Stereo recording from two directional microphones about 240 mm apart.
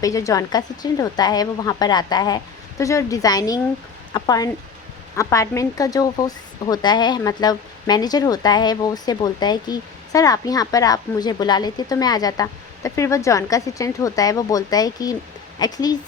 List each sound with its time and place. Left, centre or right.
0.0 s a woman's voice: centre